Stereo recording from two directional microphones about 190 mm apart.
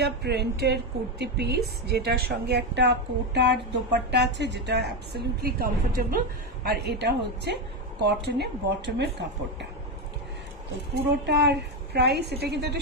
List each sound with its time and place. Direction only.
0.0 s speech: 60° right (ahead or behind)
11.2 s speech: 60° right (ahead or behind)